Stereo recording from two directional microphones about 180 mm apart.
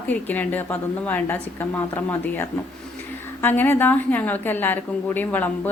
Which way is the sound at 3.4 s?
10° left (ahead or behind).